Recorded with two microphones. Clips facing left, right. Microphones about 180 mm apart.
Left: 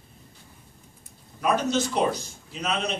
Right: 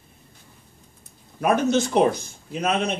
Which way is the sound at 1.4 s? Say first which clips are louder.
Right 4 dB; 55° right (ahead or behind).